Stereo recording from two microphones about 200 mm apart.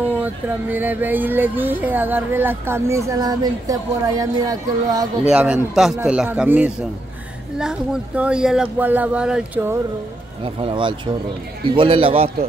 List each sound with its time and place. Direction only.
0.2 s speech: 10° right (ahead or behind)
5.3 s speech: 5° right (ahead or behind)
10.4 s speech: 25° right (ahead or behind)